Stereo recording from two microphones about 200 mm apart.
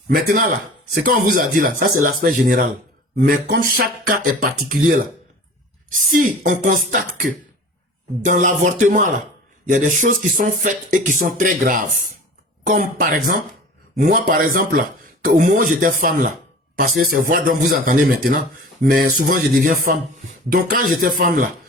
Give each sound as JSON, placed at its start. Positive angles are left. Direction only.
{"t": 0.1, "sound": "speech", "side_deg": -45}